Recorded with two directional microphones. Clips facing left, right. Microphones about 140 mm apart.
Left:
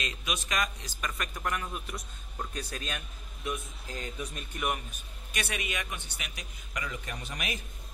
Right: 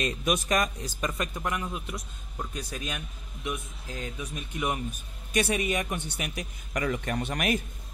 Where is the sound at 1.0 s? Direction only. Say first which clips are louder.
Right 4 dB; 25° right (ahead or behind).